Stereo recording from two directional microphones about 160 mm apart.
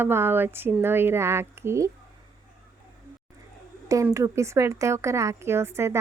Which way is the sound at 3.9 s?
20° right (ahead or behind).